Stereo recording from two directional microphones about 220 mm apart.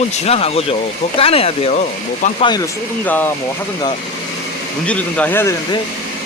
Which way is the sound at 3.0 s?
5° left (ahead or behind).